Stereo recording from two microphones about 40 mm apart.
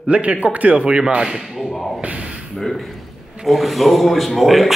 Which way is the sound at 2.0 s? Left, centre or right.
Right.